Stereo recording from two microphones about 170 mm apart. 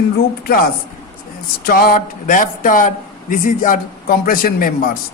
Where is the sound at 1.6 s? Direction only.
60° left (ahead or behind).